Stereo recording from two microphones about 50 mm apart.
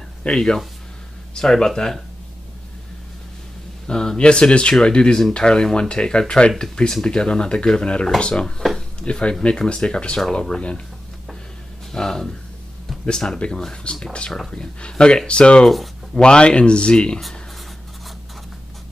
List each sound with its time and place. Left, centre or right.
0.2 s speech: centre
3.8 s speech: centre
11.9 s speech: centre
15.6 s speech: centre
16.2 s speech: centre